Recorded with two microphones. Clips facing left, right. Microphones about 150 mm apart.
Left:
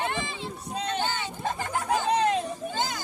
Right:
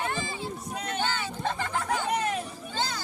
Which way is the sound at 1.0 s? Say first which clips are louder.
Even; 15° left (ahead or behind).